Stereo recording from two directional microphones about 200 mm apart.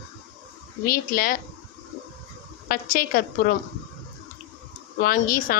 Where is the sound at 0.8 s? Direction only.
45° left (ahead or behind).